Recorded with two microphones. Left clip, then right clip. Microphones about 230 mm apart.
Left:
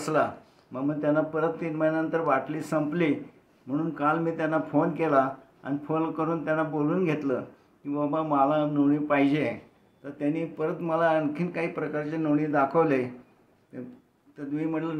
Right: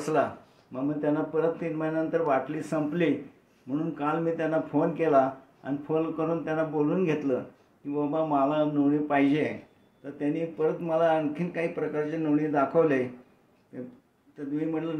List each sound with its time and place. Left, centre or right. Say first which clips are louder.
0.7 s a man's voice: left 2 dB; centre
14.5 s a man's voice: even; centre